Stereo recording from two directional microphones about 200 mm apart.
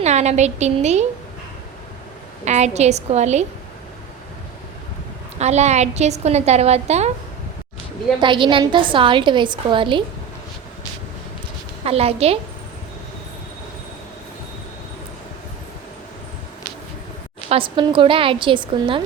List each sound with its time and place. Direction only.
0.0 s a woman's voice: 35° right (ahead or behind)
2.4 s a woman's voice: 35° right (ahead or behind)
5.4 s a woman's voice: 35° right (ahead or behind)
8.2 s a woman's voice: 25° right (ahead or behind)
11.9 s a woman's voice: 30° right (ahead or behind)
17.5 s a woman's voice: 25° right (ahead or behind)